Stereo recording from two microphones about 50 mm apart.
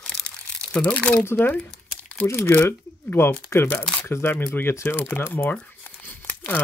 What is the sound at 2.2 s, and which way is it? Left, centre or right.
Speech, left.